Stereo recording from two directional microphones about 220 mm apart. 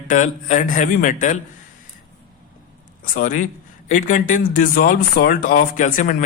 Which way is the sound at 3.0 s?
40° left (ahead or behind).